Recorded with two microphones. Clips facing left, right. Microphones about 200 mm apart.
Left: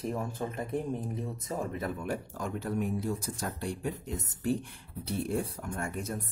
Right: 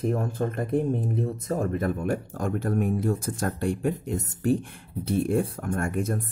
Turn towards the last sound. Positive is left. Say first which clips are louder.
# right 8 dB
turn(degrees=-50)  # may be behind; listen again after turning